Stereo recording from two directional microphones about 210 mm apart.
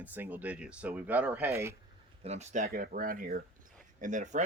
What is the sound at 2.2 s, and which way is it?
Speech, 30° right (ahead or behind).